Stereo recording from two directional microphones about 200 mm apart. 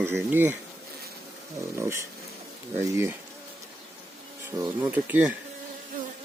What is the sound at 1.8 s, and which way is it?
Speech, 15° right (ahead or behind).